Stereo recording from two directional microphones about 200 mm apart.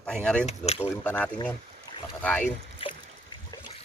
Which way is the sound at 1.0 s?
10° left (ahead or behind).